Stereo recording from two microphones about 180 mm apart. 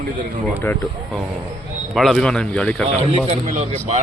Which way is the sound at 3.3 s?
40° right (ahead or behind).